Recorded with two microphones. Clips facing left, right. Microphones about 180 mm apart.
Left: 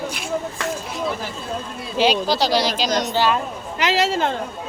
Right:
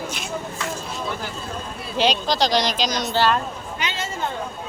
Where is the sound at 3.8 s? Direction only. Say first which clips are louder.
Left 9 dB; 75° left (ahead or behind).